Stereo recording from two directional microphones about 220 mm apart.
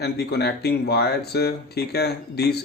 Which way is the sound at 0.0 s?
50° left (ahead or behind).